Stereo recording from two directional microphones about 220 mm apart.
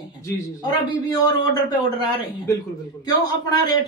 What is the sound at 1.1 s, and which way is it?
A man's voice, 15° left (ahead or behind).